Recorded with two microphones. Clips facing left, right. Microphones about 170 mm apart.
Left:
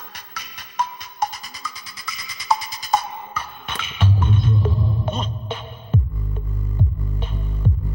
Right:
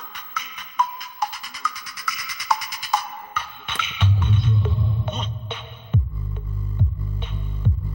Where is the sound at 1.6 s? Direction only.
30° left (ahead or behind).